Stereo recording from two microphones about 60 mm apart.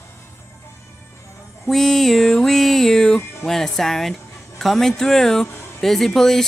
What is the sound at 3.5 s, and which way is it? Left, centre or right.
Speech, centre.